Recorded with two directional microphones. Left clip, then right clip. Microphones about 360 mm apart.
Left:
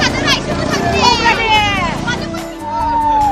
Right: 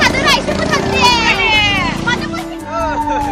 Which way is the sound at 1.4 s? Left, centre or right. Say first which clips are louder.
Even; left.